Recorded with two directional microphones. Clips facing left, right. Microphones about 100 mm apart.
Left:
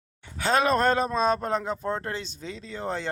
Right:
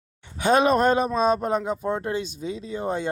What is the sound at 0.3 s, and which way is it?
A man's voice, 20° right (ahead or behind).